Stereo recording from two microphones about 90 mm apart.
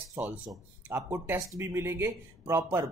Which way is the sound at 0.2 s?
30° right (ahead or behind).